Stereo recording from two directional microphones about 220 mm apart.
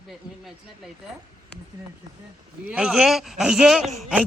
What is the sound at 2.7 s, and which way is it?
A woman's voice, 5° right (ahead or behind).